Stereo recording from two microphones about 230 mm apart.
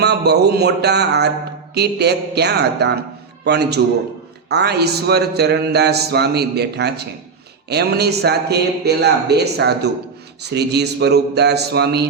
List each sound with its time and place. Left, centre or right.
0.0 s speech: right